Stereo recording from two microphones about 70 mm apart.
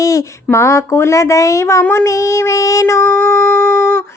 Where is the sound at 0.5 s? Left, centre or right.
Left.